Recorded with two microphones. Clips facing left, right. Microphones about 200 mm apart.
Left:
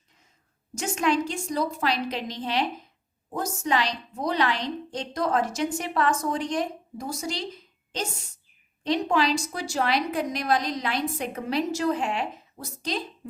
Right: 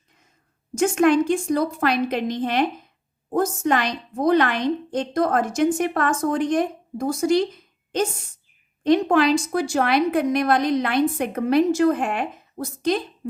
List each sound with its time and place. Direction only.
0.8 s a woman's voice: 55° right (ahead or behind)